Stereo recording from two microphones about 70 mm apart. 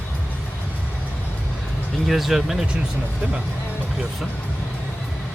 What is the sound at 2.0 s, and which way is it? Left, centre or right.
Speech, centre.